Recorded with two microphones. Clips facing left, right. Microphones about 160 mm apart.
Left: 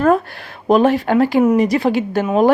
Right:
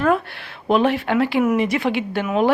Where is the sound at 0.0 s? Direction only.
40° left (ahead or behind).